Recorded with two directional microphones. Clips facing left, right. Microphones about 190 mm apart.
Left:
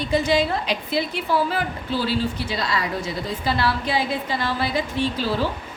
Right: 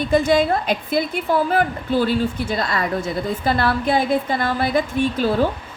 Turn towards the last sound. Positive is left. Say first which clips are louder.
# right 5 dB
turn(degrees=-50)  # may be behind; listen again after turning